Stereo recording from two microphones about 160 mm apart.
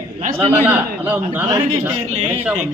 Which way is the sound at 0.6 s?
10° right (ahead or behind).